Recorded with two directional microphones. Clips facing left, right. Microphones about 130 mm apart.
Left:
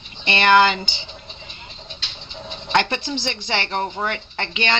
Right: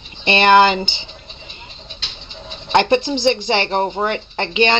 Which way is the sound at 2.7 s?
20° right (ahead or behind).